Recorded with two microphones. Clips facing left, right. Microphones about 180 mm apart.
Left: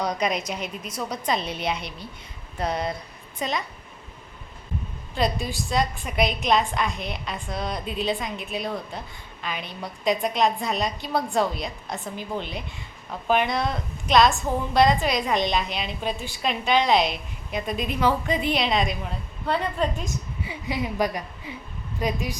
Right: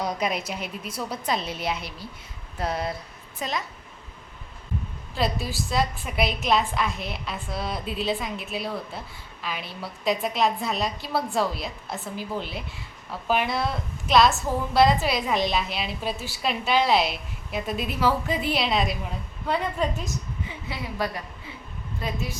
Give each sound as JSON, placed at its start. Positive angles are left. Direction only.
{"t": 0.0, "sound": "a woman's voice", "side_deg": -5}
{"t": 5.1, "sound": "a woman's voice", "side_deg": 0}
{"t": 20.4, "sound": "a woman's voice", "side_deg": 15}